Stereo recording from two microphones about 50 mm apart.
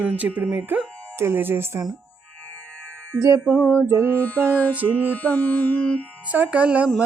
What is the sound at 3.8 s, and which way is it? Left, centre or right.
Music, right.